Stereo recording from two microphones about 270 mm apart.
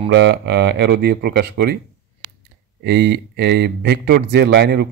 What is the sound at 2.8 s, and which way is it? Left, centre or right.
Speech, right.